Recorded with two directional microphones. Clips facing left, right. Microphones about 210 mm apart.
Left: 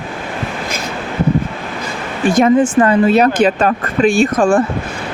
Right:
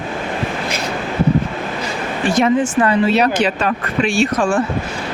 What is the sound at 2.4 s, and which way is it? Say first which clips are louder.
Speech: left 4 dB; 45° left (ahead or behind).